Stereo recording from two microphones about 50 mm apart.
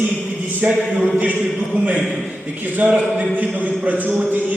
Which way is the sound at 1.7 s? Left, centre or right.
Right.